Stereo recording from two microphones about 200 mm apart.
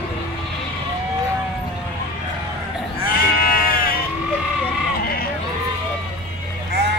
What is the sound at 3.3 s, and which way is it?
Sheep, 45° left (ahead or behind).